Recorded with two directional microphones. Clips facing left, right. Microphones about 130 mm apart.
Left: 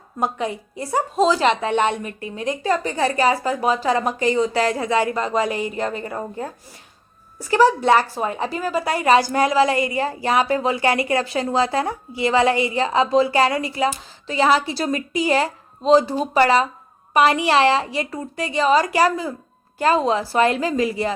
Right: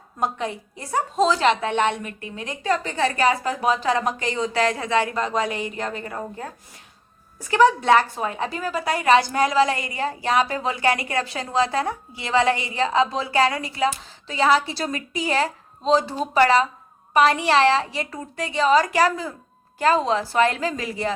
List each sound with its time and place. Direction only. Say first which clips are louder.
0.2 s a woman's voice: left 2 dB; 10° left (ahead or behind)
1.7 s a woman's voice: left 2 dB; 35° left (ahead or behind)
2.8 s a woman's voice: left 1 dB; 15° left (ahead or behind)
8.2 s a woman's voice: left 3 dB; centre (ahead or behind)
15.1 s a woman's voice: left 3 dB; 10° left (ahead or behind)